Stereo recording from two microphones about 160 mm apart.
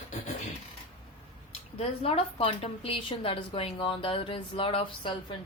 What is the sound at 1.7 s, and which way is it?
A woman's voice, 40° left (ahead or behind).